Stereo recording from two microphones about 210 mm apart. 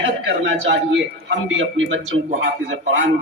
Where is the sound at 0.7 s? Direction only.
60° right (ahead or behind).